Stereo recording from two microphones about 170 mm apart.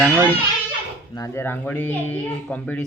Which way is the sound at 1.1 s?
15° left (ahead or behind).